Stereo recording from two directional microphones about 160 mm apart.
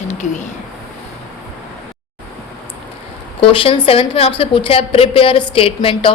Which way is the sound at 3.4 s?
35° left (ahead or behind).